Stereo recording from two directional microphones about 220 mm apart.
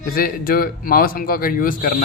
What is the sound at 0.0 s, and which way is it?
Speech, 40° left (ahead or behind).